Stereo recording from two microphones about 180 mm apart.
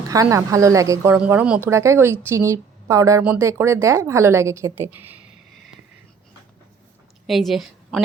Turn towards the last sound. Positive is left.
turn(degrees=0)  # may be behind; listen again after turning